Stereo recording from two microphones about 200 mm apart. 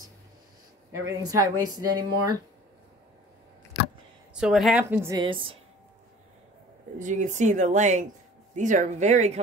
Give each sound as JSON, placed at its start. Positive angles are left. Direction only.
{"t": 0.9, "sound": "speech", "side_deg": -15}
{"t": 4.3, "sound": "a woman's voice", "side_deg": -5}
{"t": 4.8, "sound": "speech", "side_deg": -15}
{"t": 5.2, "sound": "a woman's voice", "side_deg": -25}
{"t": 7.0, "sound": "speech", "side_deg": -40}